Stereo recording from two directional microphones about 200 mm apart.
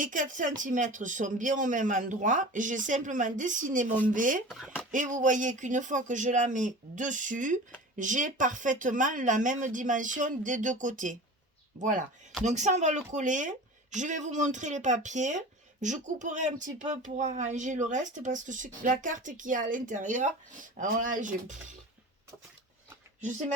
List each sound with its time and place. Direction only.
0.0 s speech: 40° right (ahead or behind)
4.4 s speech: 5° right (ahead or behind)
4.9 s speech: 40° right (ahead or behind)